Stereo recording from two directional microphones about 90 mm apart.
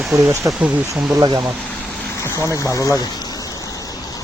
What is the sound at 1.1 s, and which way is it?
Speech, 50° right (ahead or behind).